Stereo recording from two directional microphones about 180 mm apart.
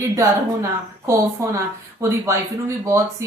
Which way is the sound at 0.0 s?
15° right (ahead or behind).